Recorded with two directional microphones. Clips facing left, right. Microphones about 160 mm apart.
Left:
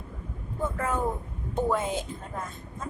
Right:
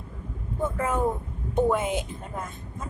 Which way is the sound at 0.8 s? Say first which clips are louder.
Right 3 dB; 20° right (ahead or behind).